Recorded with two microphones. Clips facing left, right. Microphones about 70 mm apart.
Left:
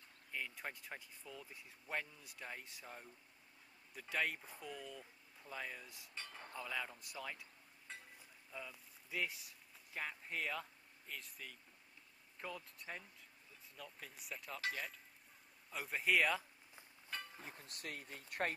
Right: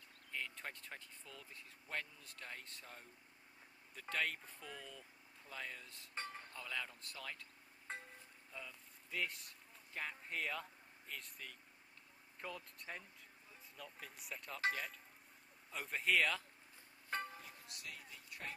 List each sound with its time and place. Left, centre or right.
0.3 s speech: centre
4.1 s speech: centre
7.9 s a sound: right
8.5 s speech: centre
17.4 s speech: left